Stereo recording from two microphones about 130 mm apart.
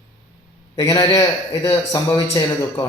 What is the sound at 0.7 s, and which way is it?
Speech, 20° left (ahead or behind).